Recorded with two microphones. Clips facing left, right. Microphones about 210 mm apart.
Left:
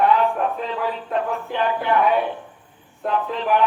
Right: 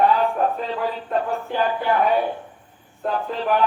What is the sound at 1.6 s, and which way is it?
A man's voice, 35° right (ahead or behind).